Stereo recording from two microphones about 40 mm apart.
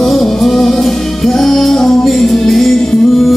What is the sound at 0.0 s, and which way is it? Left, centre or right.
Music, centre.